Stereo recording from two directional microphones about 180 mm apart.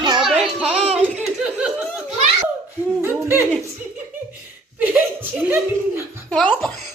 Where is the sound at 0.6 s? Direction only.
35° right (ahead or behind).